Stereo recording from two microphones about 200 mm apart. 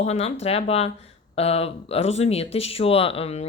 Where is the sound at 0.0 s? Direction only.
30° left (ahead or behind).